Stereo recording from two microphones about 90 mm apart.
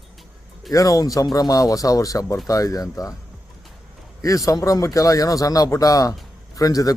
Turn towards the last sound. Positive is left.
turn(degrees=40)  # may be behind; listen again after turning